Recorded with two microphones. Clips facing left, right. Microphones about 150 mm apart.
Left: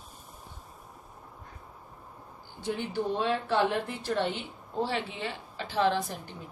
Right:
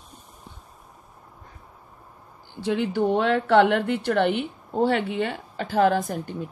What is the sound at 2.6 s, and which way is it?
Speech, 80° right.